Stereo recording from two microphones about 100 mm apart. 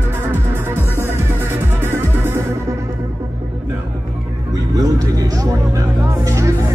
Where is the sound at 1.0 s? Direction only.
25° right (ahead or behind).